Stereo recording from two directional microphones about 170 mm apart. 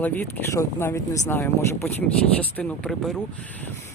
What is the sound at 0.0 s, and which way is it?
Speech, 10° left (ahead or behind).